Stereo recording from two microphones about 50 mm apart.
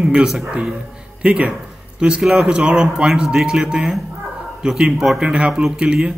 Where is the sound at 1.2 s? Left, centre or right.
Right.